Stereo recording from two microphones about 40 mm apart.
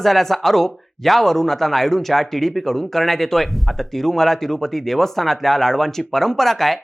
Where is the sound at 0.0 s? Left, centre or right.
Centre.